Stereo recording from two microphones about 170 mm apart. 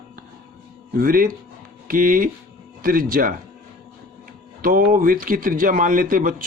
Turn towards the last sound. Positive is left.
turn(degrees=-55)  # may be behind; listen again after turning